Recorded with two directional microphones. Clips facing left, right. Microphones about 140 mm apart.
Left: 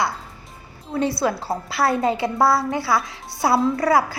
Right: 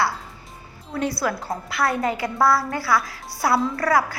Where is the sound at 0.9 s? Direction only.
25° left (ahead or behind).